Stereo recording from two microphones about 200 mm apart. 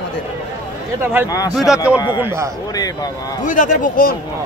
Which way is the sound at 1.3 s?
20° left (ahead or behind).